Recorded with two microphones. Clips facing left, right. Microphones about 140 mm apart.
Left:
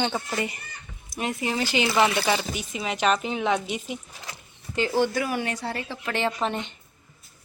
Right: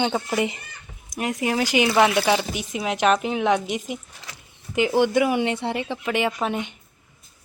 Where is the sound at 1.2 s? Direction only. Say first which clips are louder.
Right 4 dB; 5° right (ahead or behind).